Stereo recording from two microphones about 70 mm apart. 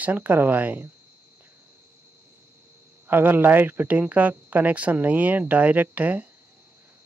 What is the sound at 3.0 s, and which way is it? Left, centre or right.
Speech, right.